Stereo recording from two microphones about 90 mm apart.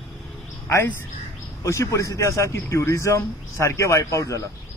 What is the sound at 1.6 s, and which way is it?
A man's voice, 35° left (ahead or behind).